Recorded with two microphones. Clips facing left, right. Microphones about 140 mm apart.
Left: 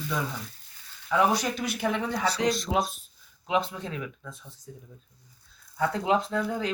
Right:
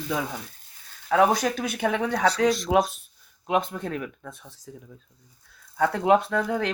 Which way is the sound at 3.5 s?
50° right (ahead or behind).